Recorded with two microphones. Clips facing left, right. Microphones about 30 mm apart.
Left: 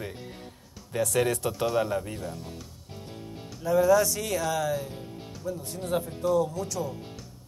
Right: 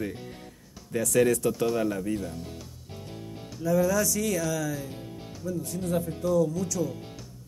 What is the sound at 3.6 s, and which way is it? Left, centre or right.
Speech, left.